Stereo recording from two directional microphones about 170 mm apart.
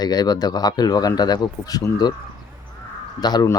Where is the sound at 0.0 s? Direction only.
25° left (ahead or behind).